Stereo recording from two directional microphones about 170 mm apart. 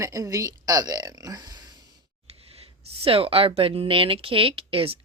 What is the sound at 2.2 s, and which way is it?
Speech, 35° right (ahead or behind).